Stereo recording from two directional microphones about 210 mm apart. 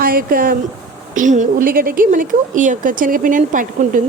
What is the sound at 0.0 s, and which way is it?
Speech, 45° right (ahead or behind).